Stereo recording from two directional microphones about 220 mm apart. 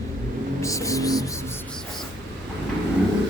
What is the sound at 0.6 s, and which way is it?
Music, 15° left (ahead or behind).